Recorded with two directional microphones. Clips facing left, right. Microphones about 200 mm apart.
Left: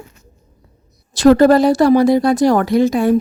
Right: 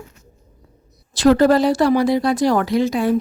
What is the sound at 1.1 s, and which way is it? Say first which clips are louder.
Speech: left 4 dB; 45° left (ahead or behind).